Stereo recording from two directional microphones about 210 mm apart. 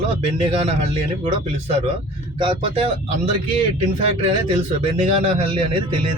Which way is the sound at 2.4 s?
25° right (ahead or behind).